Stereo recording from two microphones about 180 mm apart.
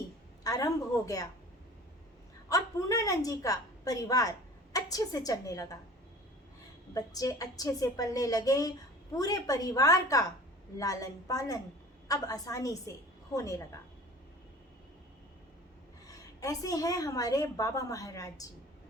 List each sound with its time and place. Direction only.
0.4 s a woman's voice: 20° left (ahead or behind)
2.5 s a woman's voice: 20° left (ahead or behind)
6.9 s a woman's voice: 20° left (ahead or behind)
16.0 s a woman's voice: 20° left (ahead or behind)